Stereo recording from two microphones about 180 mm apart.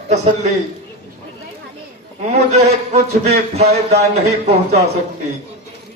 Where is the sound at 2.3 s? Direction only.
40° right (ahead or behind).